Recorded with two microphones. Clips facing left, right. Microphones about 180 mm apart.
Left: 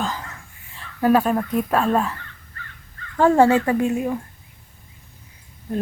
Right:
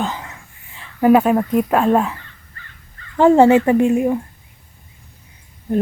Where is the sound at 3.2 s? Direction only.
20° right (ahead or behind).